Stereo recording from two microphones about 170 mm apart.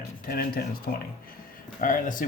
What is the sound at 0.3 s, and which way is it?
Speech, 60° left (ahead or behind).